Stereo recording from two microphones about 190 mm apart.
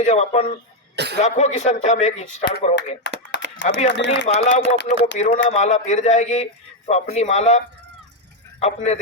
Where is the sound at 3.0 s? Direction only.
65° left (ahead or behind).